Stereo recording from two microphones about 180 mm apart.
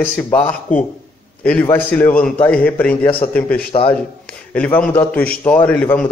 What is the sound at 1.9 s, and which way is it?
A man's voice, 5° left (ahead or behind).